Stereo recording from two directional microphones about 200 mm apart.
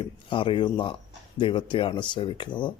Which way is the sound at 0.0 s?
25° left (ahead or behind).